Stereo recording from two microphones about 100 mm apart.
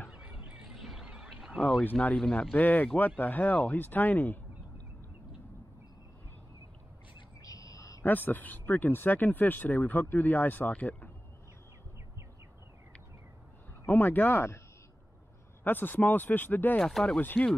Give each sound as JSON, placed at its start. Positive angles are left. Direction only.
{"t": 0.1, "sound": "a sound", "side_deg": -10}
{"t": 1.6, "sound": "a sound", "side_deg": 5}
{"t": 1.9, "sound": "speech", "side_deg": 15}
{"t": 2.1, "sound": "speech", "side_deg": 5}
{"t": 2.5, "sound": "speech", "side_deg": 15}
{"t": 7.4, "sound": "bird", "side_deg": 35}
{"t": 8.0, "sound": "speech", "side_deg": 20}
{"t": 13.8, "sound": "speech", "side_deg": 20}
{"t": 15.6, "sound": "speech", "side_deg": 20}
{"t": 16.8, "sound": "speech", "side_deg": 5}